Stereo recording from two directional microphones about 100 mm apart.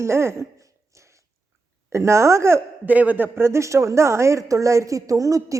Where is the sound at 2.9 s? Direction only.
15° right (ahead or behind).